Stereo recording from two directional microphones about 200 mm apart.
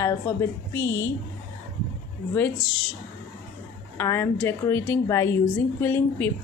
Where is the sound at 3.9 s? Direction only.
10° left (ahead or behind).